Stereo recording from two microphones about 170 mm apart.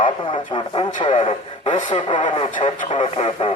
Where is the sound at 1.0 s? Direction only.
30° left (ahead or behind).